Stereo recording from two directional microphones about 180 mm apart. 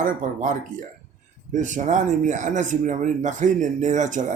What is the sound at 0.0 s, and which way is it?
Speech, 50° right (ahead or behind).